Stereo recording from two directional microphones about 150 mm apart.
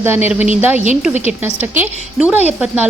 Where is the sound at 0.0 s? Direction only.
15° right (ahead or behind).